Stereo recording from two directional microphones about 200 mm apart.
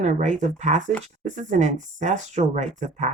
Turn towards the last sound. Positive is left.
turn(degrees=-35)  # may be behind; listen again after turning